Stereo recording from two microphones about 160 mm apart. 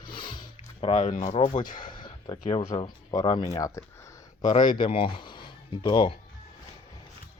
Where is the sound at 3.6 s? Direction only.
20° left (ahead or behind).